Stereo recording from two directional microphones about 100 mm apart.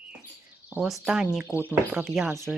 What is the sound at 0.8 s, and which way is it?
Speech, 5° right (ahead or behind).